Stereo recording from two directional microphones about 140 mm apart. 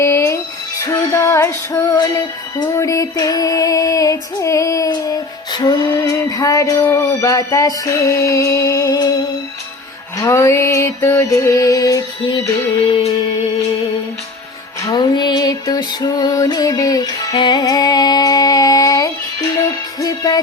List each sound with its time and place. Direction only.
0.0 s music: 20° left (ahead or behind)
10.2 s music: 25° left (ahead or behind)
14.8 s music: 30° left (ahead or behind)